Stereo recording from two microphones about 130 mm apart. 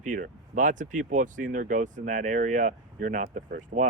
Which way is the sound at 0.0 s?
80° right.